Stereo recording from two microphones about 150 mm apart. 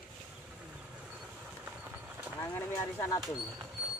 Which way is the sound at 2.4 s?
20° left (ahead or behind).